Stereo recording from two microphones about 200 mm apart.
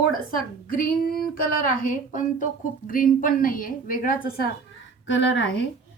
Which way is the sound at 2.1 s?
40° left (ahead or behind).